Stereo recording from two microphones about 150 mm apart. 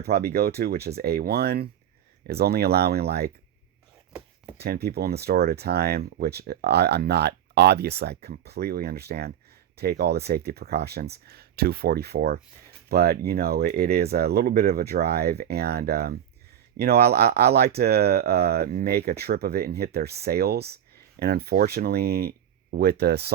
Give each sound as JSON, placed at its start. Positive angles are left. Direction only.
{"t": 0.0, "sound": "speech", "side_deg": -90}
{"t": 4.5, "sound": "speech", "side_deg": -90}